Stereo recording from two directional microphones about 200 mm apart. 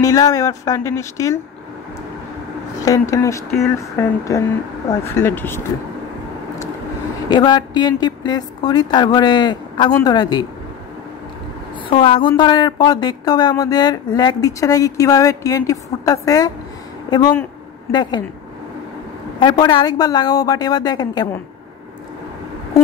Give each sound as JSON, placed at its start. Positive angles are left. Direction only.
{"t": 0.0, "sound": "speech", "side_deg": 15}
{"t": 2.8, "sound": "speech", "side_deg": 15}
{"t": 7.2, "sound": "speech", "side_deg": 20}
{"t": 11.9, "sound": "speech", "side_deg": 25}
{"t": 19.4, "sound": "speech", "side_deg": 20}